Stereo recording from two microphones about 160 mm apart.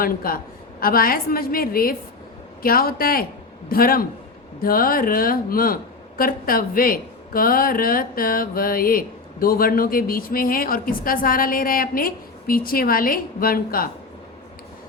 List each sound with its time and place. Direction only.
0.0 s a man's voice: 65° left (ahead or behind)